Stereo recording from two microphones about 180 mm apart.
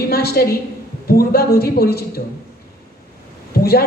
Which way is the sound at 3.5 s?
60° left (ahead or behind).